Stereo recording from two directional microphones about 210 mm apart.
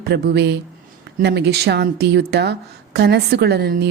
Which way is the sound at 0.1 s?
55° right (ahead or behind).